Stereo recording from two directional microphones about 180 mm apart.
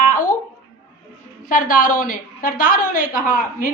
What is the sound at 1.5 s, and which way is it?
A woman's voice, 50° left (ahead or behind).